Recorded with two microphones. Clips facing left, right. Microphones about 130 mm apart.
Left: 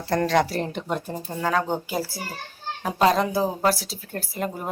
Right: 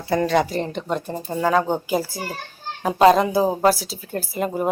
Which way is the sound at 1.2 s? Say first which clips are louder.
Right 5 dB; 10° right (ahead or behind).